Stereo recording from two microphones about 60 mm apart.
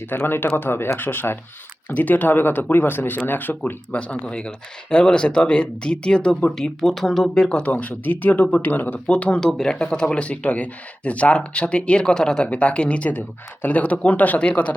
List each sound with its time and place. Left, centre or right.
0.1 s speech: left
3.9 s speech: centre
6.5 s speech: centre
7.6 s speech: left
9.0 s speech: left
9.5 s speech: centre